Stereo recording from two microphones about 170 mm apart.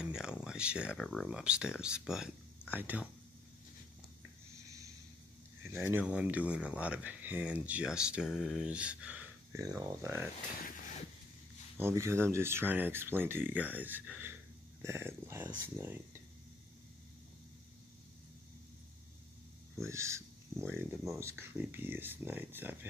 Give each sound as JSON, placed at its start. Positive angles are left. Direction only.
{"t": 0.0, "sound": "speech", "side_deg": -5}
{"t": 5.7, "sound": "speech", "side_deg": -15}
{"t": 11.7, "sound": "speech", "side_deg": -15}
{"t": 19.8, "sound": "speech", "side_deg": -15}